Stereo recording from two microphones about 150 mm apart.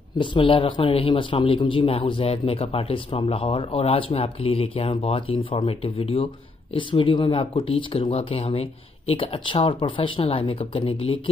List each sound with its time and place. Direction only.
0.2 s a man's voice: 35° left (ahead or behind)